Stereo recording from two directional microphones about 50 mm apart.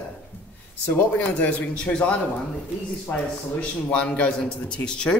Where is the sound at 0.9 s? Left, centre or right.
Left.